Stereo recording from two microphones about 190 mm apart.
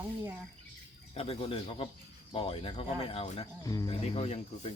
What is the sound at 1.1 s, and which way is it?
Speech, 30° left (ahead or behind).